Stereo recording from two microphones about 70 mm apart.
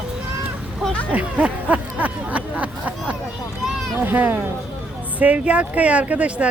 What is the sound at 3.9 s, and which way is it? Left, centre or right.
Speech, right.